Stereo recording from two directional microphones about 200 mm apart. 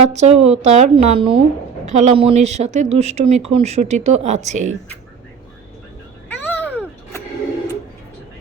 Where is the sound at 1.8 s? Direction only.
35° right (ahead or behind).